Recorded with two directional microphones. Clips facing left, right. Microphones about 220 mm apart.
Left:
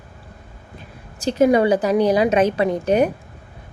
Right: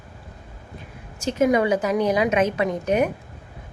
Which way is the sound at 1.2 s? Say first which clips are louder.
Left 4 dB; 35° left (ahead or behind).